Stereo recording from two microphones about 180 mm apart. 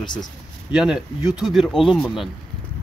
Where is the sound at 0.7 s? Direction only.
5° right (ahead or behind).